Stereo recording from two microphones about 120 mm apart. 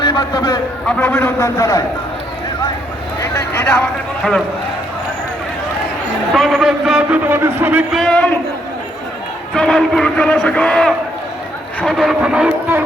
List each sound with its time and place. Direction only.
0.0 s a man's voice: 40° left (ahead or behind)
0.9 s a man's voice: 15° left (ahead or behind)
3.3 s speech: 15° left (ahead or behind)
6.3 s a man's voice: centre (ahead or behind)
7.3 s a man's voice: 20° right (ahead or behind)
7.9 s speech: 10° left (ahead or behind)
9.6 s a man's voice: 5° left (ahead or behind)